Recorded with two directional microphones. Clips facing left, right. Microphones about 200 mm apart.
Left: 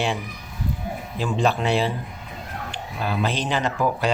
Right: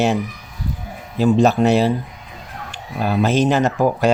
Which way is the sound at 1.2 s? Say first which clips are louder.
Right 9 dB; 40° right (ahead or behind).